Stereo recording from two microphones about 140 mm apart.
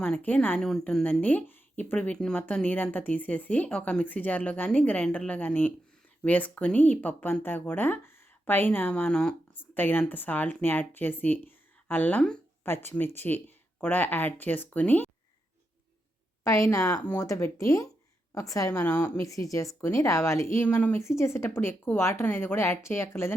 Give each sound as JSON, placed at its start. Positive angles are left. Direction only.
{"t": 0.0, "sound": "speech", "side_deg": 10}
{"t": 16.4, "sound": "a woman's voice", "side_deg": 20}